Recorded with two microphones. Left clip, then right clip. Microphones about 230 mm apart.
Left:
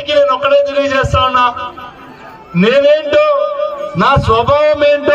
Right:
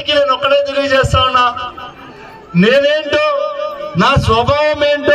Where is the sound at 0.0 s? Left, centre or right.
Right.